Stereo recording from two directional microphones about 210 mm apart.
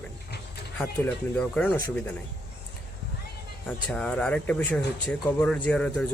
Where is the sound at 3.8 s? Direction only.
5° left (ahead or behind).